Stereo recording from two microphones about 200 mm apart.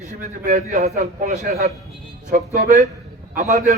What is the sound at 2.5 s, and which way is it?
A man's voice, 35° right (ahead or behind).